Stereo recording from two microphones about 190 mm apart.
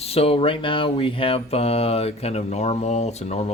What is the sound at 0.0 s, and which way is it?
Speech, 30° left (ahead or behind).